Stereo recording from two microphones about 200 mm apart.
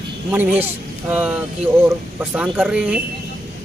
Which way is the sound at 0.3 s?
10° right (ahead or behind).